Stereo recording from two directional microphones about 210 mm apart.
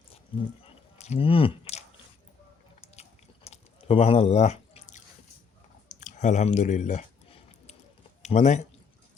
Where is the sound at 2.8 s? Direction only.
30° left (ahead or behind).